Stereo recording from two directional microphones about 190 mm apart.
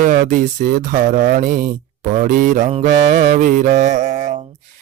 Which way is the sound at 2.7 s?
40° right (ahead or behind).